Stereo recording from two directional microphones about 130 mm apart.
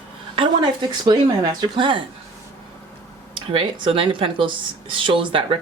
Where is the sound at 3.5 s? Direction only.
40° right (ahead or behind).